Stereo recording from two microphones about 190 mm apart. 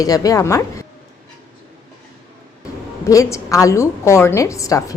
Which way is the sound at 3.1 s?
15° left (ahead or behind).